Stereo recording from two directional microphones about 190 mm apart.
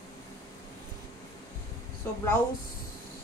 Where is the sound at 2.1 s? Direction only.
15° left (ahead or behind).